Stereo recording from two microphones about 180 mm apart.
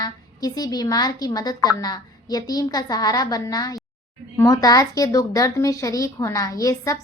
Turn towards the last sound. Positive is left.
turn(degrees=20)  # may be behind; listen again after turning